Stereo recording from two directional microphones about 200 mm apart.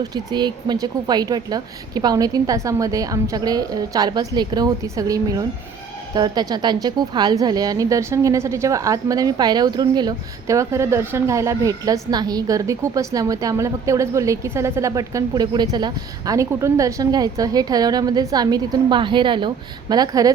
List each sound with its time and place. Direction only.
0.0 s a woman's voice: 20° right (ahead or behind)